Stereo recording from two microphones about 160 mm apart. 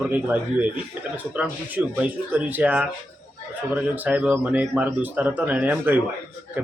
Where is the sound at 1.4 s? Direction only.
10° right (ahead or behind).